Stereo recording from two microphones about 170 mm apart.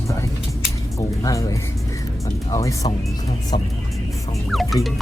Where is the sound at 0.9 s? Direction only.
20° left (ahead or behind).